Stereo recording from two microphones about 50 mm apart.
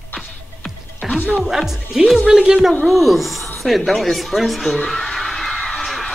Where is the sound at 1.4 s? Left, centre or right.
Centre.